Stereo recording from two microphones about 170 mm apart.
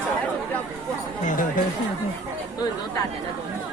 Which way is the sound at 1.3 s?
50° left (ahead or behind).